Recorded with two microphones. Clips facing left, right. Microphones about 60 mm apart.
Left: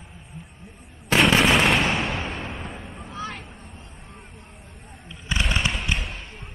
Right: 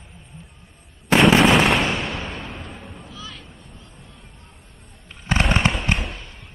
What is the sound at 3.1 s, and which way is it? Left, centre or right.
Vehicle, left.